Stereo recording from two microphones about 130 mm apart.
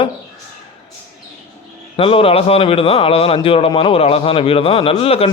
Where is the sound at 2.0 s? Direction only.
45° left (ahead or behind).